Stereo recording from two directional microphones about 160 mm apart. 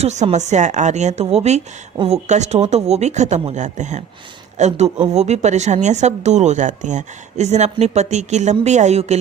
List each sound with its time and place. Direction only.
0.0 s a woman's voice: 45° right (ahead or behind)